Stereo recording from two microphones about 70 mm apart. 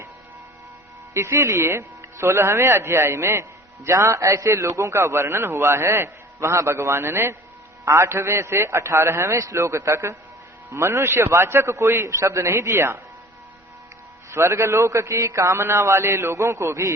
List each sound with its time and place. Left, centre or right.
1.1 s a man's voice: right
14.3 s a man's voice: right